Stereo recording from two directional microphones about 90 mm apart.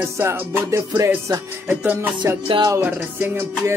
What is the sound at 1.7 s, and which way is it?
Music, 25° right (ahead or behind).